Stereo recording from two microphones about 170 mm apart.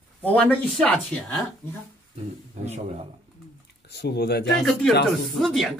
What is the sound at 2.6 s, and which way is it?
Speech, 40° right (ahead or behind).